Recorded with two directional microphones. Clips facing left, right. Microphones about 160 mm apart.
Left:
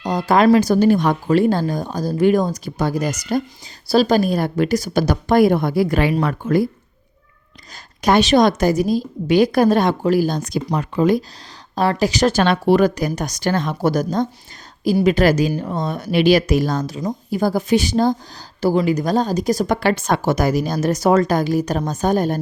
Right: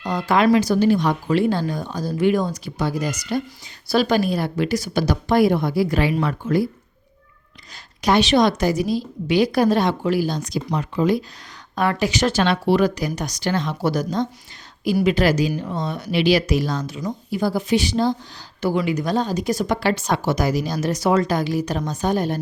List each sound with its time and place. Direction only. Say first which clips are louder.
0.0 s speech: left 3 dB; 35° left (ahead or behind)
8.0 s speech: left 3 dB; 45° left (ahead or behind)
11.7 s speech: left 3 dB; 35° left (ahead or behind)